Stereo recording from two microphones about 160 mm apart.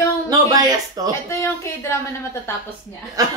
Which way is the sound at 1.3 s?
15° left (ahead or behind).